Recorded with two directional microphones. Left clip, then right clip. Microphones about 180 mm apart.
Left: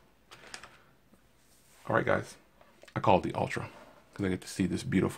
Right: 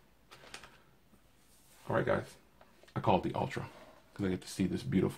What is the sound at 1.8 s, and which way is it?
Speech, 45° left (ahead or behind).